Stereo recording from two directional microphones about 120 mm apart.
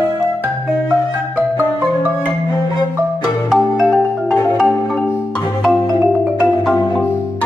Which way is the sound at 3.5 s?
Centre (ahead or behind).